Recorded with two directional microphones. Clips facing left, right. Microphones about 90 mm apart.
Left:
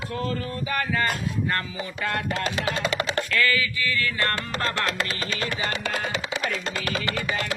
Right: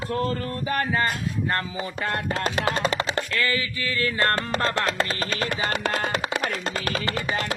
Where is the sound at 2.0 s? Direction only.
30° right (ahead or behind).